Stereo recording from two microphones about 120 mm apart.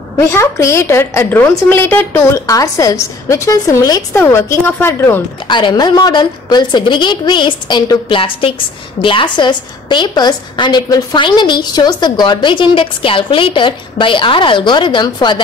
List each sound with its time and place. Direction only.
0.2 s a woman's voice: 25° left (ahead or behind)
5.5 s a woman's voice: 40° left (ahead or behind)